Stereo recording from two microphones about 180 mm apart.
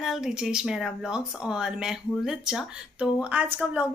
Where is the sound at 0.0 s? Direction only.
Centre (ahead or behind).